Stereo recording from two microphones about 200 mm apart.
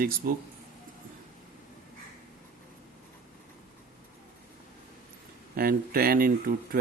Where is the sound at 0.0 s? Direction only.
45° right (ahead or behind).